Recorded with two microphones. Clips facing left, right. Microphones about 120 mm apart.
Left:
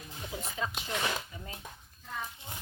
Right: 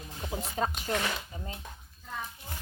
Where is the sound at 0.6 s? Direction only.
45° right (ahead or behind).